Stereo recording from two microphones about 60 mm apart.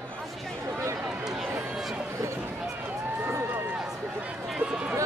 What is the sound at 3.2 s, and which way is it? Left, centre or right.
Run, right.